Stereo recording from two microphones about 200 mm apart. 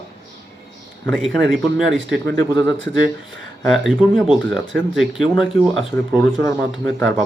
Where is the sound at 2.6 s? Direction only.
65° right (ahead or behind).